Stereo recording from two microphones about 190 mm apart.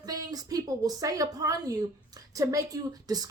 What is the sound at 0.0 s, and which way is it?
A woman's voice, 20° right (ahead or behind).